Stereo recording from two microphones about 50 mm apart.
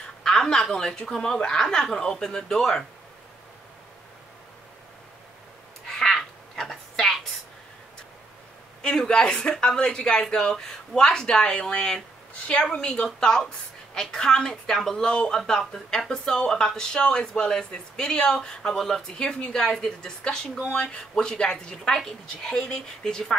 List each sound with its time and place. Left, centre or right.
0.2 s speech: centre
5.9 s a sound: centre
8.8 s speech: centre